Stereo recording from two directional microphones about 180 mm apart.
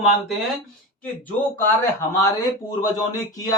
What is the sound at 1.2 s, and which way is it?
Speech, 10° left (ahead or behind).